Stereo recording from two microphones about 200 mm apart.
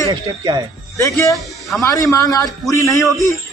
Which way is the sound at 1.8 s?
15° left (ahead or behind).